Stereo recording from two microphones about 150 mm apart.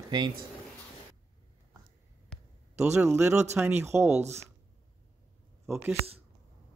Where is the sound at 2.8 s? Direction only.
15° right (ahead or behind).